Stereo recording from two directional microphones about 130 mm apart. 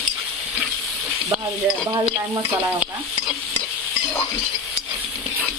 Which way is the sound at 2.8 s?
10° right (ahead or behind).